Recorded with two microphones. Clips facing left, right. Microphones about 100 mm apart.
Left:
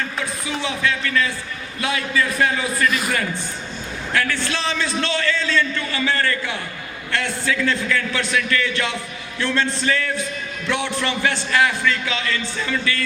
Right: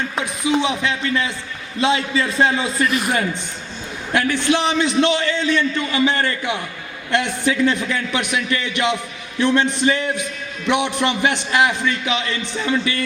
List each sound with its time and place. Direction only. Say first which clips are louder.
0.2 s a sound: right 6 dB; 20° right (ahead or behind)
1.8 s a man's voice: right 4 dB; 25° right (ahead or behind)
4.1 s a man's voice: right 5 dB; 20° right (ahead or behind)